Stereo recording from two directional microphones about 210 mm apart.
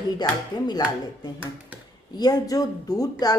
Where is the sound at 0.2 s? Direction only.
20° left (ahead or behind).